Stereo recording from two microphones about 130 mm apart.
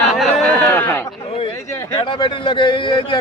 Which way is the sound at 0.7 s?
15° left (ahead or behind).